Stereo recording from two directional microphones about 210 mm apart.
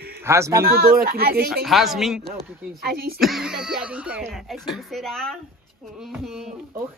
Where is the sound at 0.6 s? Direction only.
45° right (ahead or behind).